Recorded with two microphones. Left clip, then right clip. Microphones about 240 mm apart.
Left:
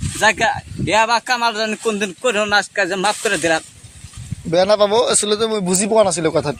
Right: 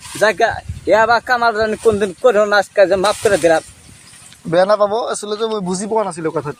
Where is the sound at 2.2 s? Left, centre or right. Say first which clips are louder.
Right 4 dB; left.